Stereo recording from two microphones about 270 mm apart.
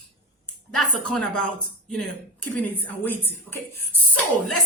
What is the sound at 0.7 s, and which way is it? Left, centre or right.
Speech, centre.